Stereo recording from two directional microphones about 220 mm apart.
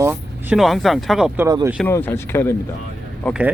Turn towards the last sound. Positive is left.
turn(degrees=-5)  # may be behind; listen again after turning